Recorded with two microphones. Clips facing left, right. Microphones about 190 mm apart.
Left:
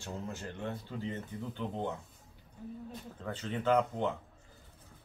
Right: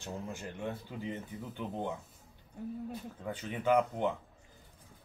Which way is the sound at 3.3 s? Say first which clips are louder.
Even; 10° right (ahead or behind).